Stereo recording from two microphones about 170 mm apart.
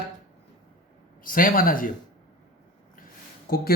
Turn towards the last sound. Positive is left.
turn(degrees=60)  # may be behind; listen again after turning